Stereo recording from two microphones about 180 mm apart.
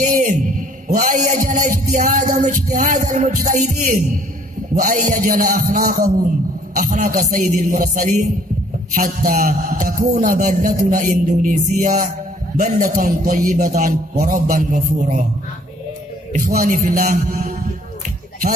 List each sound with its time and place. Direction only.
0.0 s a sound: 45° right (ahead or behind)
4.7 s a man's voice: 50° right (ahead or behind)
16.3 s a man's voice: 50° right (ahead or behind)